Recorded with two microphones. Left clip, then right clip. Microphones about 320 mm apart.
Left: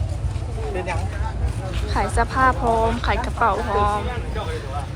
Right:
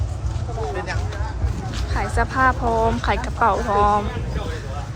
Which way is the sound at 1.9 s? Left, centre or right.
Centre.